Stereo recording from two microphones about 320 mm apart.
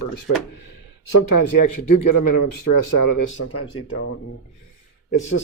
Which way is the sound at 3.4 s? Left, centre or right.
Left.